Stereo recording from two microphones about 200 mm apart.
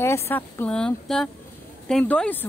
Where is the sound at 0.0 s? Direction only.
10° left (ahead or behind).